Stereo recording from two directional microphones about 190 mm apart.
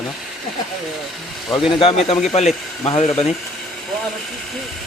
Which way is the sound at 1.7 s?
30° left (ahead or behind).